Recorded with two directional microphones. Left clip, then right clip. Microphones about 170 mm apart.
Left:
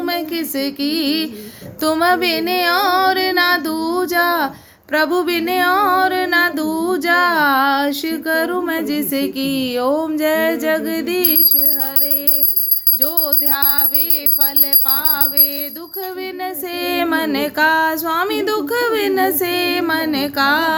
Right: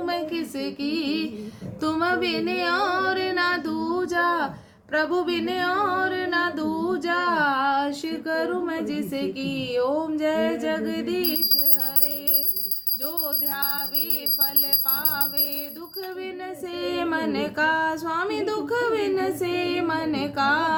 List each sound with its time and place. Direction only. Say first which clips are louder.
0.0 s a sound: left 6 dB; 35° left (ahead or behind)
1.8 s female singing: left 8 dB; 30° left (ahead or behind)
16.4 s female singing: left 9 dB; 35° left (ahead or behind)